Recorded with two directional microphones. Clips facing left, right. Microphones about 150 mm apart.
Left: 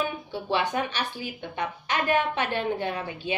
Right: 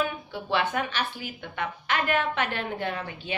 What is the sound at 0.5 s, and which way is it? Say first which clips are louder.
Speech: even; 15° left (ahead or behind).